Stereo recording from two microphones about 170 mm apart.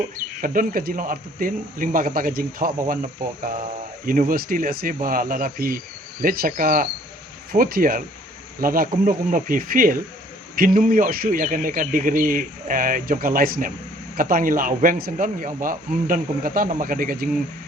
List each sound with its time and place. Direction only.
0.4 s speech: 55° right (ahead or behind)